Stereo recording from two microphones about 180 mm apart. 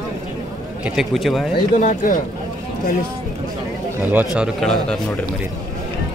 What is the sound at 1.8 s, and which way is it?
Speech, 45° left (ahead or behind).